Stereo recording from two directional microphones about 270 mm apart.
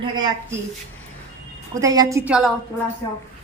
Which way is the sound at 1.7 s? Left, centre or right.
Centre.